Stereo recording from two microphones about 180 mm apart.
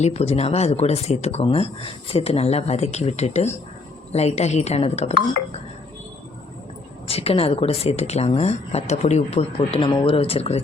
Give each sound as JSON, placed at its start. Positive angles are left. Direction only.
{"t": 0.0, "sound": "speech", "side_deg": 35}
{"t": 7.1, "sound": "speech", "side_deg": 35}